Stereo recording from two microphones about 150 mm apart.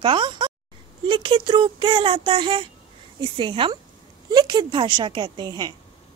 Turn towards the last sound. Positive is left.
turn(degrees=-30)  # may be behind; listen again after turning